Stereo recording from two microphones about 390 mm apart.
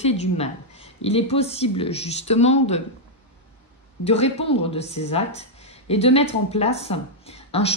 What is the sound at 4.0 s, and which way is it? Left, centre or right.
Speech, centre.